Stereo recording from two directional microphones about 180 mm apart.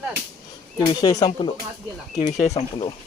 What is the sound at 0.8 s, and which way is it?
Speech, 20° left (ahead or behind).